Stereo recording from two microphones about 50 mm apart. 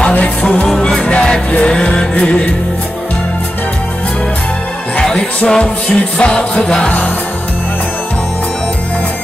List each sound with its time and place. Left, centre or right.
0.1 s music: left
5.4 s music: left